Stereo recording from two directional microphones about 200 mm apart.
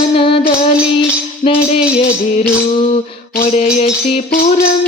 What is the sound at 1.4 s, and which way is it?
Music, 30° left (ahead or behind).